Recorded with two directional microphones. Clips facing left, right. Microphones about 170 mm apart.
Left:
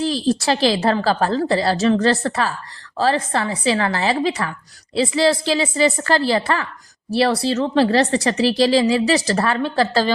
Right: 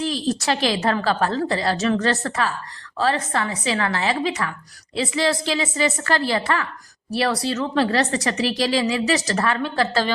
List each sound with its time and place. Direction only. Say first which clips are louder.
0.0 s speech: left 4 dB; 35° left (ahead or behind)